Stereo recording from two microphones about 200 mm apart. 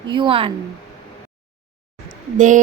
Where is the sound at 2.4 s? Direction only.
40° right (ahead or behind).